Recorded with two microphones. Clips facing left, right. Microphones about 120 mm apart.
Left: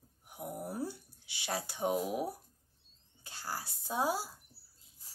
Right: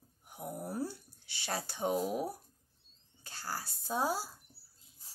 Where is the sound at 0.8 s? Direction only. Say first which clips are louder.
Left 1 dB; 15° left (ahead or behind).